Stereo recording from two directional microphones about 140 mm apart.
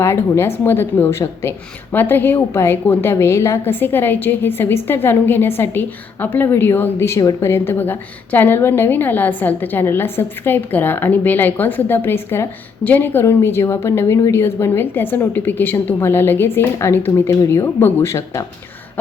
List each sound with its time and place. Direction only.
0.0 s a woman's voice: 20° left (ahead or behind)